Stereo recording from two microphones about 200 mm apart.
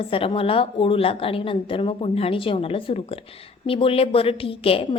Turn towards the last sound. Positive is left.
turn(degrees=30)  # may be behind; listen again after turning